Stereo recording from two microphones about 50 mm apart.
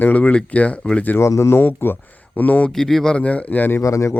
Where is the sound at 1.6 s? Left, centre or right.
Left.